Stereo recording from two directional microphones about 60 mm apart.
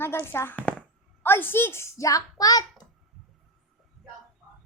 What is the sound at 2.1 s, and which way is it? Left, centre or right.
Speech, left.